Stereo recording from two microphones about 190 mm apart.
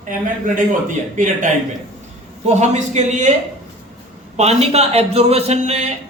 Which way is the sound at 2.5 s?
35° right (ahead or behind).